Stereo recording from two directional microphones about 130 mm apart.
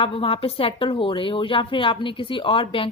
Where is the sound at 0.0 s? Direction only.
45° left (ahead or behind).